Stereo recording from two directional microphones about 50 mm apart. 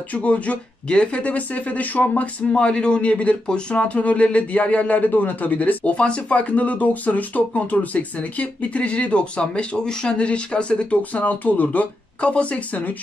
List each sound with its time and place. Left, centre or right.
0.1 s speech: left
2.5 s speech: centre